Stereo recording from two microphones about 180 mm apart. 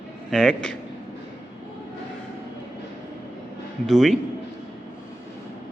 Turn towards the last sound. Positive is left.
turn(degrees=0)  # may be behind; listen again after turning